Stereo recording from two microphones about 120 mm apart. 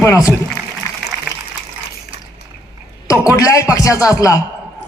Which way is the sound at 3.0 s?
30° left (ahead or behind).